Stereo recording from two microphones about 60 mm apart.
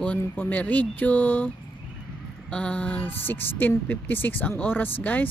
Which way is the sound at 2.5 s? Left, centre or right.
Centre.